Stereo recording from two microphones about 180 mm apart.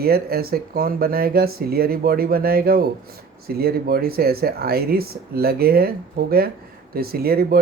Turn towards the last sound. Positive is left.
turn(degrees=-60)  # may be behind; listen again after turning